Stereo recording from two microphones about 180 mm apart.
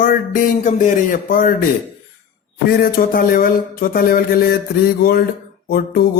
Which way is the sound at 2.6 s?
55° left (ahead or behind).